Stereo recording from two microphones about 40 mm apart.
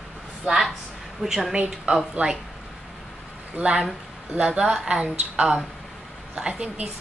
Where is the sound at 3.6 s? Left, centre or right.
Right.